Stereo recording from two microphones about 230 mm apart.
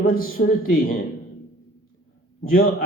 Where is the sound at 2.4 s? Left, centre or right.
Left.